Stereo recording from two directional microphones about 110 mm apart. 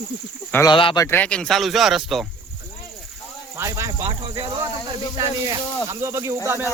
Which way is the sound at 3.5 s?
25° right (ahead or behind).